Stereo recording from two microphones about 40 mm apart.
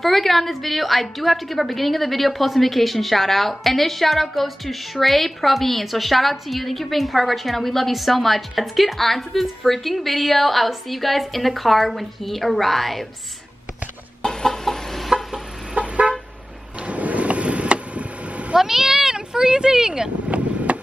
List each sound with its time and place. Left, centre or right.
0.0 s a woman's voice: centre
14.2 s chicken: centre
15.0 s a sound: centre
15.7 s vehicle horn: right
16.8 s vehicle: right
18.6 s a sound: centre
20.2 s vehicle: right